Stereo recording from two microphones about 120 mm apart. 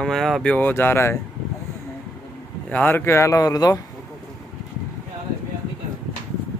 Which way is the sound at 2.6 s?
15° left (ahead or behind).